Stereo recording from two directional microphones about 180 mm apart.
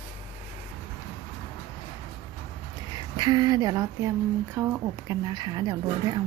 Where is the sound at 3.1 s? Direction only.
25° right (ahead or behind).